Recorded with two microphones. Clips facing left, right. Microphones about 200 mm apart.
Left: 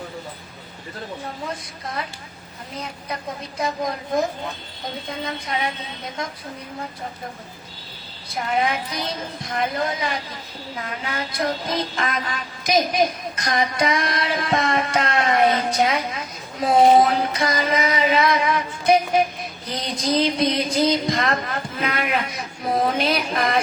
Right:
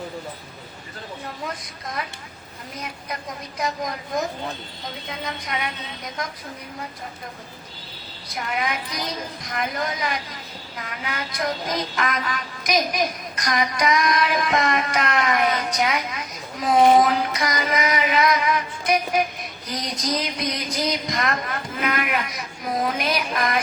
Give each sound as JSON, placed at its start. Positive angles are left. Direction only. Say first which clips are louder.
{"t": 8.4, "sound": "music", "louder": "left 4 dB", "side_deg": 30}
{"t": 21.8, "sound": "speech", "louder": "left 1 dB", "side_deg": 30}